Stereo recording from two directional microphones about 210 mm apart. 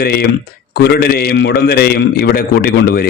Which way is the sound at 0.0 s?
50° left (ahead or behind).